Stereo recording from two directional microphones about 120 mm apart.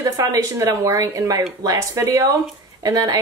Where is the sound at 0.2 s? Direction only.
25° right (ahead or behind).